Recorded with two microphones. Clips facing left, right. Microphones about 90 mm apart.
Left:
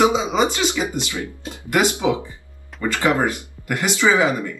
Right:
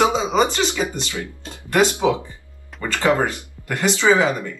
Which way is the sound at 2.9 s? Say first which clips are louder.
Right 1 dB; 15° left (ahead or behind).